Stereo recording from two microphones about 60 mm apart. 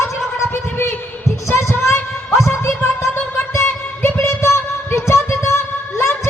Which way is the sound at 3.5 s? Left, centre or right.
Left.